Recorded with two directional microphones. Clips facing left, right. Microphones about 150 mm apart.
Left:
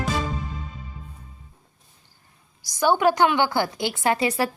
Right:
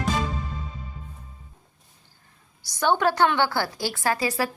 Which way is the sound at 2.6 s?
10° left (ahead or behind).